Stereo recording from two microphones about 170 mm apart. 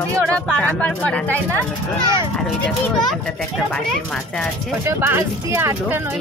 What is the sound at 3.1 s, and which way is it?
Speech, centre (ahead or behind).